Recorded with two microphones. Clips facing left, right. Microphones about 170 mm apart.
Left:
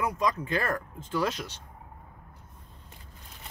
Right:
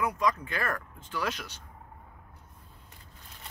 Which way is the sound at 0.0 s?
30° left (ahead or behind).